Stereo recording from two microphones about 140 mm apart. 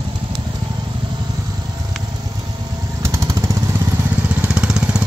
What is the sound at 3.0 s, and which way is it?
Jackhammer, 20° right (ahead or behind).